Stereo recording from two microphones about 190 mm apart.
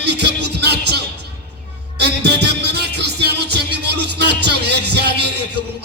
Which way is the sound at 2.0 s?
60° right (ahead or behind).